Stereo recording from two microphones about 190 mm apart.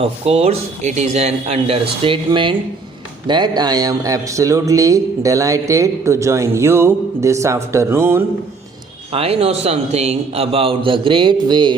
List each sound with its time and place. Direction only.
0.0 s a man's voice: 30° right (ahead or behind); by 8.2 s 10° right (ahead or behind)
9.1 s a man's voice: 30° right (ahead or behind)